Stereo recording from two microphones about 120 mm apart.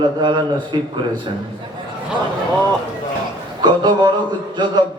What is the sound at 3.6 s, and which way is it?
Speech, 35° right (ahead or behind).